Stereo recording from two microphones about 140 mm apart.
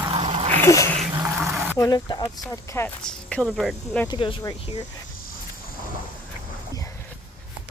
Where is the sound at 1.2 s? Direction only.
20° right (ahead or behind).